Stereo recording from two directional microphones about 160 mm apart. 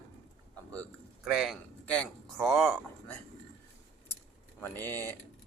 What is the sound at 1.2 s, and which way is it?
Speech, 5° right (ahead or behind).